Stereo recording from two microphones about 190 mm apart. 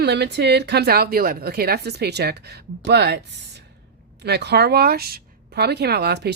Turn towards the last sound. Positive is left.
turn(degrees=-60)  # may be behind; listen again after turning